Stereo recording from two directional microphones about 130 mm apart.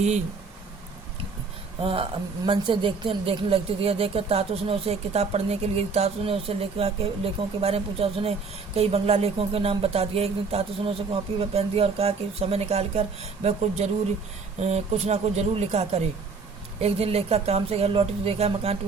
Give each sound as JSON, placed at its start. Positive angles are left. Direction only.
{"t": 1.8, "sound": "speech", "side_deg": -45}